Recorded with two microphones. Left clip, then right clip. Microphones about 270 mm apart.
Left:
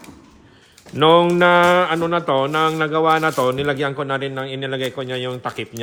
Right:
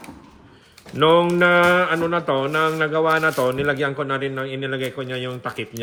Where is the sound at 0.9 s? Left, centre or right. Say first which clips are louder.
Left 2 dB; left.